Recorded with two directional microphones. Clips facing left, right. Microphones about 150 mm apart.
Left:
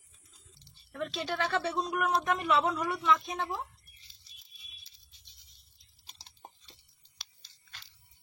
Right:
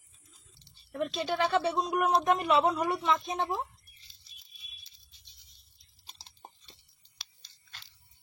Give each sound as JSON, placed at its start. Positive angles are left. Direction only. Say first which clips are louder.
{"t": 0.9, "sound": "speech", "louder": "right 3 dB", "side_deg": -15}